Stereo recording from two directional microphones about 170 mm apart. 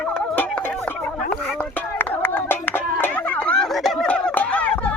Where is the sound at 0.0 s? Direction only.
5° left (ahead or behind).